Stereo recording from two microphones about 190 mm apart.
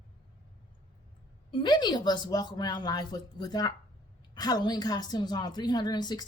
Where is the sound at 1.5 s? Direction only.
25° left (ahead or behind).